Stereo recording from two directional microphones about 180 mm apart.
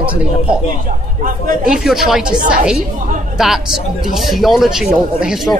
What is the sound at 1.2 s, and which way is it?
Speech, 50° right (ahead or behind).